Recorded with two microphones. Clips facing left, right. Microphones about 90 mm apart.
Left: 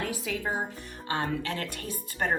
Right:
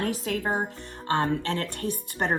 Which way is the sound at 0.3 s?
45° right (ahead or behind).